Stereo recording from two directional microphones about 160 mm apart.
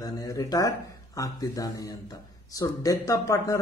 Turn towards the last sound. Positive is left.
turn(degrees=20)  # may be behind; listen again after turning